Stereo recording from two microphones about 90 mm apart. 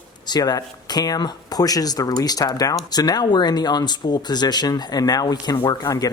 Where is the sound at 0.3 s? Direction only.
45° left (ahead or behind).